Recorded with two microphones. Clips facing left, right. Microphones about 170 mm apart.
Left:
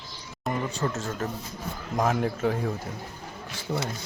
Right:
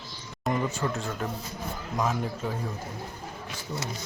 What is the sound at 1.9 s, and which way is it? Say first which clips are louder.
Speech: left 4 dB; 65° left (ahead or behind).